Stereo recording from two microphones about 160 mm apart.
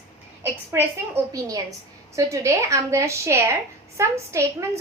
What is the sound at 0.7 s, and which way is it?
A woman's voice, 20° right (ahead or behind).